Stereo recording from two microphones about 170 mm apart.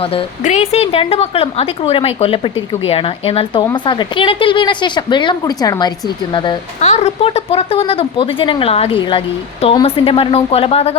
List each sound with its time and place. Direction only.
0.1 s a woman's voice: 40° left (ahead or behind)
6.8 s speech: 40° left (ahead or behind)